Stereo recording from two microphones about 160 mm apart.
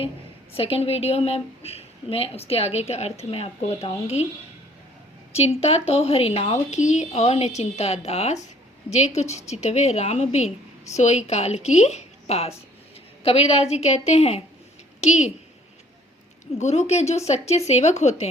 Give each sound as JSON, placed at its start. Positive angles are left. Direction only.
{"t": 0.5, "sound": "a woman's voice", "side_deg": 35}
{"t": 5.3, "sound": "a woman's voice", "side_deg": 40}
{"t": 16.6, "sound": "a woman's voice", "side_deg": 45}